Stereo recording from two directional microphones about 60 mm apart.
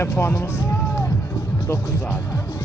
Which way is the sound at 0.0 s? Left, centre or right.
Left.